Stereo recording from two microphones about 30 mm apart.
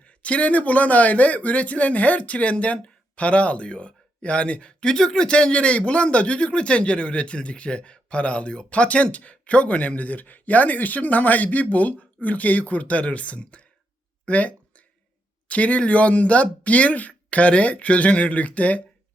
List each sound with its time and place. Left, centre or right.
0.0 s speech: left
4.8 s speech: left
5.3 s a man's voice: left